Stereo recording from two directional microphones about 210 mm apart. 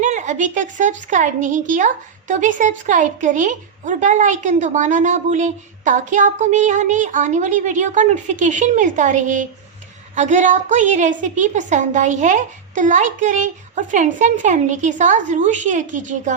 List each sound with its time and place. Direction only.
0.0 s a woman's voice: 35° right (ahead or behind)